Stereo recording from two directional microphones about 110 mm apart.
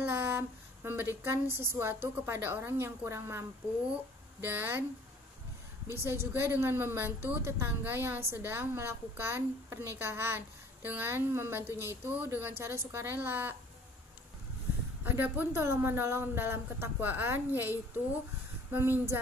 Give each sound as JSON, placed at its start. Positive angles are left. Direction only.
{"t": 0.1, "sound": "a woman's voice", "side_deg": -20}
{"t": 5.9, "sound": "a woman's voice", "side_deg": -25}
{"t": 11.7, "sound": "speech", "side_deg": 25}
{"t": 12.1, "sound": "a woman's voice", "side_deg": -15}
{"t": 15.0, "sound": "a woman's voice", "side_deg": -15}